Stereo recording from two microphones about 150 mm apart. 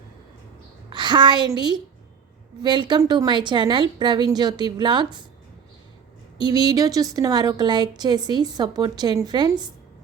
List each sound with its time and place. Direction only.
0.9 s a woman's voice: 30° right (ahead or behind)
6.4 s a woman's voice: 25° right (ahead or behind)